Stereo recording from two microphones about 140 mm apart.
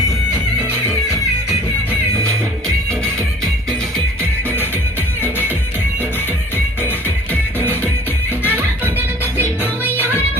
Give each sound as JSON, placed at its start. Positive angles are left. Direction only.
{"t": 1.9, "sound": "music", "side_deg": -20}
{"t": 3.4, "sound": "music", "side_deg": 5}
{"t": 4.2, "sound": "music", "side_deg": -15}
{"t": 8.4, "sound": "music", "side_deg": -10}